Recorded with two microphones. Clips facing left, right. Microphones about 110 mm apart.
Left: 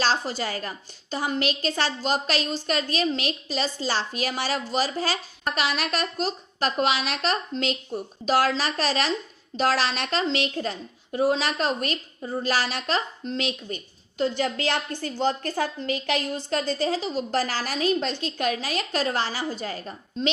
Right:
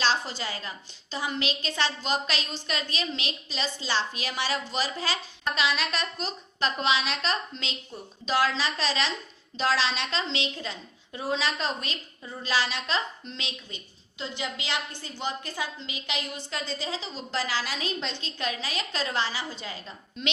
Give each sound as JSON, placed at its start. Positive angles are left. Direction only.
{"t": 0.0, "sound": "a woman's voice", "side_deg": 40}